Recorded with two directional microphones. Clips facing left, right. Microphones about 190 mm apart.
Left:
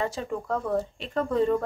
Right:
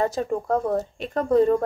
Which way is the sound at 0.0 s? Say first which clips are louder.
Right 6 dB; 45° right (ahead or behind).